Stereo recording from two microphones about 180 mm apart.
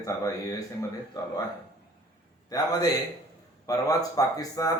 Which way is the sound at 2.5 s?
20° left (ahead or behind).